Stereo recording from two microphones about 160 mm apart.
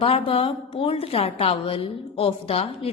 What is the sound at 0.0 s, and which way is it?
A woman's voice, 35° left (ahead or behind).